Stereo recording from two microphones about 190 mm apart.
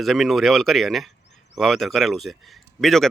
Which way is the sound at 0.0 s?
Centre (ahead or behind).